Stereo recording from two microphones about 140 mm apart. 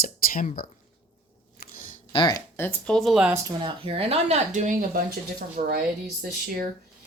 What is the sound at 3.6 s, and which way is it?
Speech, 40° right (ahead or behind).